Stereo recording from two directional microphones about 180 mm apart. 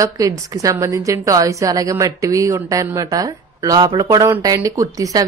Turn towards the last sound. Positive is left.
turn(degrees=-20)  # may be behind; listen again after turning